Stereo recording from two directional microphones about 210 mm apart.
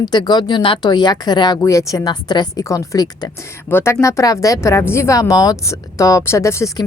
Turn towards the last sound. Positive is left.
turn(degrees=15)  # may be behind; listen again after turning